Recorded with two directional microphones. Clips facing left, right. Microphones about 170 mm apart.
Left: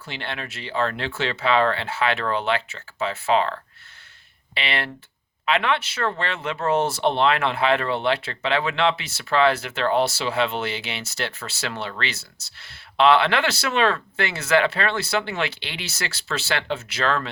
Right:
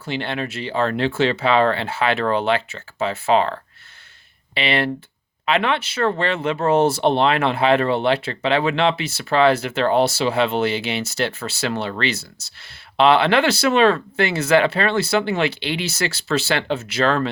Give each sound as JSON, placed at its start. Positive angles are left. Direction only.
{"t": 0.0, "sound": "speech", "side_deg": -35}